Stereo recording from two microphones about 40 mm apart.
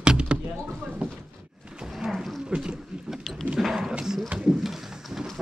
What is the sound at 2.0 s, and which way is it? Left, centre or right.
Roaring cats, centre.